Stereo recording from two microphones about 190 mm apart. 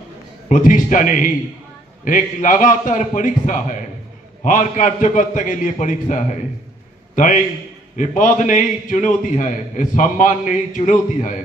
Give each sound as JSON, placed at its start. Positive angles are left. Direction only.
{"t": 0.5, "sound": "a man's voice", "side_deg": 45}